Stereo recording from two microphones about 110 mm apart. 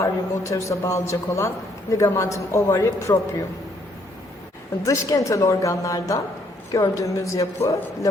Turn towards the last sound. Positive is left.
turn(degrees=30)  # may be behind; listen again after turning